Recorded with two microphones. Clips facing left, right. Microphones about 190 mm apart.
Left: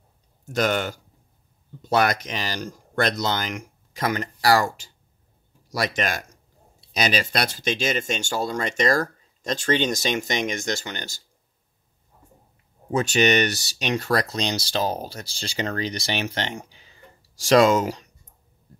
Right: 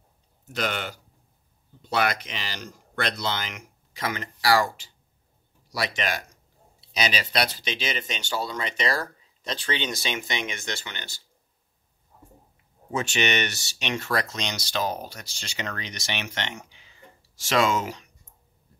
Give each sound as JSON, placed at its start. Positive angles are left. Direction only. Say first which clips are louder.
{"t": 0.5, "sound": "speech", "louder": "left 7 dB", "side_deg": 45}
{"t": 12.9, "sound": "speech", "louder": "left 6 dB", "side_deg": 40}